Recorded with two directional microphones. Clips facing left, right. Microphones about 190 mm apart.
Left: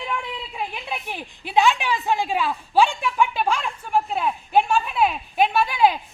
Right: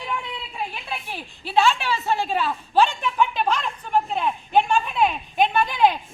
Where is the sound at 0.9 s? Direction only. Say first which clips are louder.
Left 2 dB; 15° left (ahead or behind).